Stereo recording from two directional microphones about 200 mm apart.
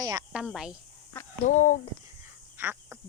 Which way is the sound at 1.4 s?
40° left (ahead or behind).